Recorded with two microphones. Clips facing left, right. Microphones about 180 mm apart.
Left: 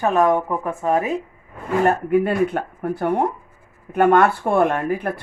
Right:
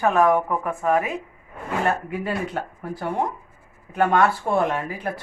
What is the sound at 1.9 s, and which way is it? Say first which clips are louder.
Speech: left 7 dB; 50° left (ahead or behind).